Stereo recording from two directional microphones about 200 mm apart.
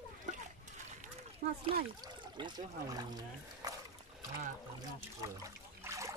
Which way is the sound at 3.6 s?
15° right (ahead or behind).